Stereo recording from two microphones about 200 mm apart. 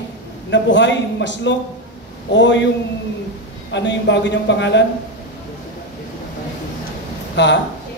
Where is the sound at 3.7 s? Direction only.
60° left (ahead or behind).